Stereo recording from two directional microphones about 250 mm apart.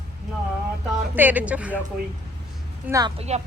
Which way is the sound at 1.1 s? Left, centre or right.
Centre.